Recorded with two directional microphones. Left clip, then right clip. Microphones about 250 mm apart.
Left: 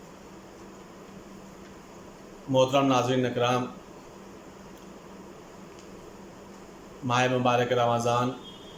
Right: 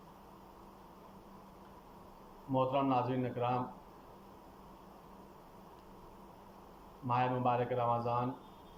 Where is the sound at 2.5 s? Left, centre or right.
Left.